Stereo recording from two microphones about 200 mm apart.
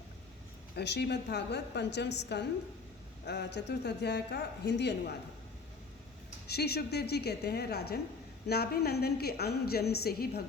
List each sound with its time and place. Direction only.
0.8 s a woman's voice: 55° left (ahead or behind)
6.5 s a woman's voice: 55° left (ahead or behind)